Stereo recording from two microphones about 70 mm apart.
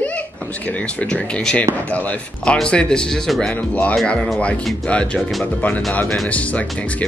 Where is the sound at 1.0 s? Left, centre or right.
Centre.